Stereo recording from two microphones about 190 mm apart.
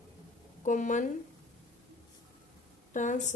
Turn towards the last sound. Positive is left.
turn(degrees=40)  # may be behind; listen again after turning